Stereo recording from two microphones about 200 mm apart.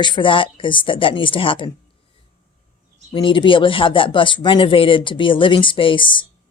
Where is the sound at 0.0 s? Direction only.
25° left (ahead or behind).